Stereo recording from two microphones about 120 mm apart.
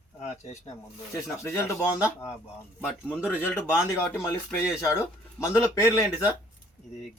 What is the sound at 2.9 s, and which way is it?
Speech, 10° right (ahead or behind).